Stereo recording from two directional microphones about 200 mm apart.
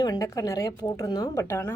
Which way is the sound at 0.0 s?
20° left (ahead or behind).